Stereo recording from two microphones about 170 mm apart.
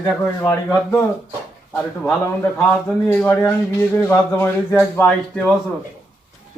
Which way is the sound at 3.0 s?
15° left (ahead or behind).